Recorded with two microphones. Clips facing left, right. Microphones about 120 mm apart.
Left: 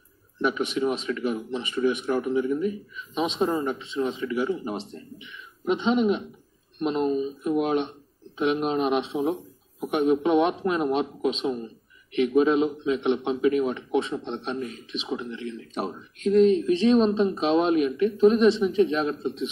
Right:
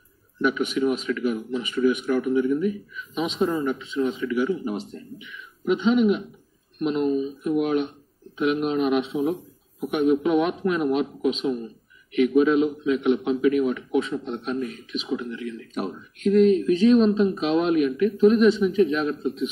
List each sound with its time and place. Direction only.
0.4 s a man's voice: 30° left (ahead or behind)